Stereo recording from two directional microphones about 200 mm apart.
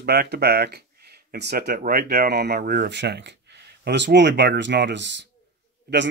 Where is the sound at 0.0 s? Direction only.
55° right (ahead or behind).